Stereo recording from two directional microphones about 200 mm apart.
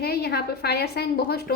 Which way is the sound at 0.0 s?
50° left (ahead or behind).